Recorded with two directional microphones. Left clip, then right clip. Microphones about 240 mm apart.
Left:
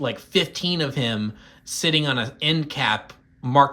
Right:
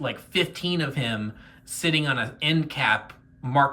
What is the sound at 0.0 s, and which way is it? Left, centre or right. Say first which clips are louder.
Speech: left 3 dB; centre.